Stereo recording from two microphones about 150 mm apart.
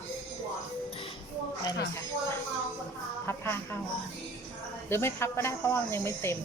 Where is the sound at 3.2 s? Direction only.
15° left (ahead or behind).